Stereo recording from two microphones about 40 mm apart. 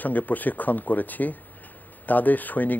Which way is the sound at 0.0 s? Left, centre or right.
Left.